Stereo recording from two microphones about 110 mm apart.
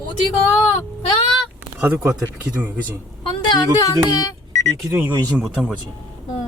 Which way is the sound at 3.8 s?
30° left (ahead or behind).